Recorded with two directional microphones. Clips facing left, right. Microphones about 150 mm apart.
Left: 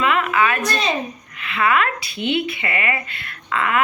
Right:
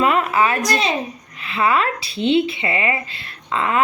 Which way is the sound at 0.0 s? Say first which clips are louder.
Right 2 dB; 35° right (ahead or behind).